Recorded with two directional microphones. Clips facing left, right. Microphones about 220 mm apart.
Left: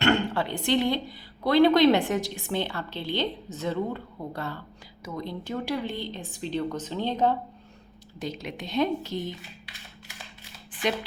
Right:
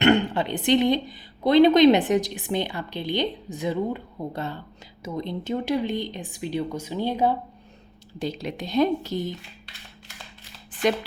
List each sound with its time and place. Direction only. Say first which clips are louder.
0.0 s a woman's voice: right 4 dB; 20° right (ahead or behind)
8.2 s a woman's voice: right 4 dB; 35° right (ahead or behind)